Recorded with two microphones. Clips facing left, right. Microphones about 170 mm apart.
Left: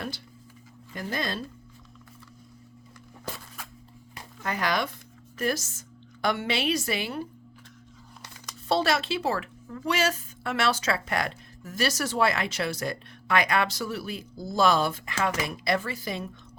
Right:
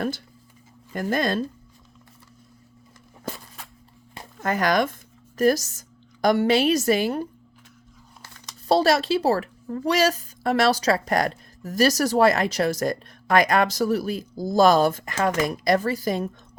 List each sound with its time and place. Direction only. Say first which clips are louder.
0.9 s a woman's voice: right 8 dB; 50° right (ahead or behind)
4.4 s a woman's voice: right 7 dB; 45° right (ahead or behind)
8.6 s speech: right 6 dB; 40° right (ahead or behind)